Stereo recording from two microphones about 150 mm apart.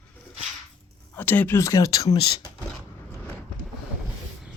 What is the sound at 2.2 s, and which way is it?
Speech, 35° left (ahead or behind).